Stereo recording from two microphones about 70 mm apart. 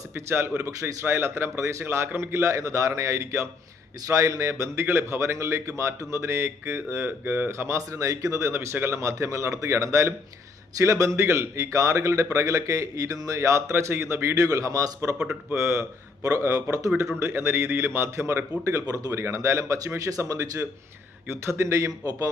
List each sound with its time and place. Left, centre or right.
0.2 s a man's voice: right
2.5 s speech: right
14.3 s a man's voice: right
15.5 s a man's voice: right
21.2 s speech: right